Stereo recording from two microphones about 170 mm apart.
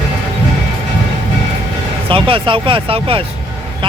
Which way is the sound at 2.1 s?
30° right (ahead or behind).